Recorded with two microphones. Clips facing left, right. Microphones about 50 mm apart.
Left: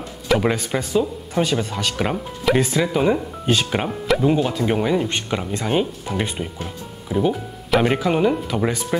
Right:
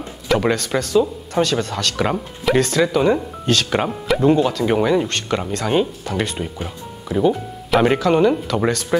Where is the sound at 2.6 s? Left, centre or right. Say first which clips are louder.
Right 2 dB; centre.